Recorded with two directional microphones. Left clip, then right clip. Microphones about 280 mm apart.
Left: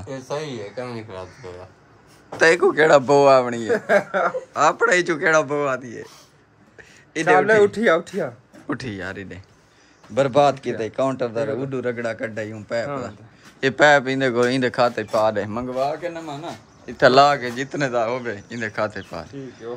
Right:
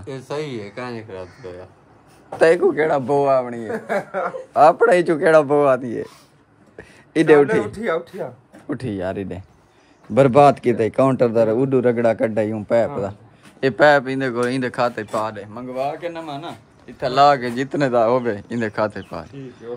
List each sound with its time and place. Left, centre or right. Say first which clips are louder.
0.0 s speech: right 1 dB; right
0.8 s speech: right 2 dB; centre
2.3 s speech: right 1 dB; centre
3.7 s speech: left 5 dB; left
4.6 s speech: right 5 dB; centre
6.8 s a sound: right 6 dB; centre
7.4 s speech: left 5 dB; left
8.6 s speech: right 4 dB; centre
13.6 s speech: right 1 dB; centre